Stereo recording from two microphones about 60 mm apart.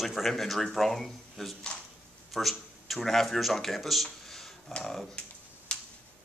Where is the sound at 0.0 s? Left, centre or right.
Centre.